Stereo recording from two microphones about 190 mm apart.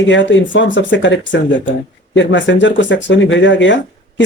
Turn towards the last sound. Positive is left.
turn(degrees=75)  # may be behind; listen again after turning